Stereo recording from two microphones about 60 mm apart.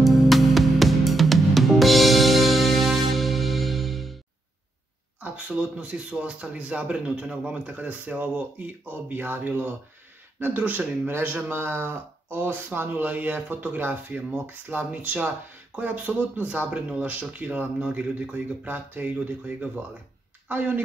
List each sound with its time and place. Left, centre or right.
0.0 s music: centre
5.2 s speech: right
9.1 s a woman's voice: right